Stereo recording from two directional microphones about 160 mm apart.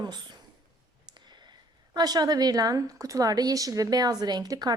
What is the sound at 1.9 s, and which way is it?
A woman's voice, 25° right (ahead or behind).